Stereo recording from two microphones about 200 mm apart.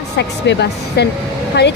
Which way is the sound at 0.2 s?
60° left (ahead or behind).